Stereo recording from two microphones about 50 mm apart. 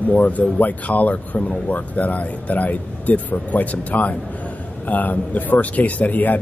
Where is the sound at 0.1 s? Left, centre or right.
Left.